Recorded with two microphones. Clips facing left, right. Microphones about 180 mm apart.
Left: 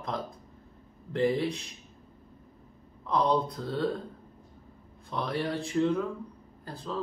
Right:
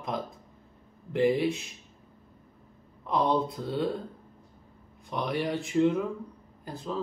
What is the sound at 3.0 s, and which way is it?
Speech, 20° right (ahead or behind).